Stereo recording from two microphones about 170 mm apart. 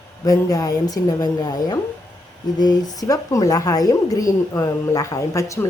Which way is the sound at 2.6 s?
25° left (ahead or behind).